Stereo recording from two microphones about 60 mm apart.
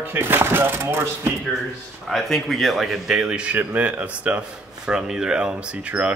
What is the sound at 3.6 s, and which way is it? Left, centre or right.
Speech, right.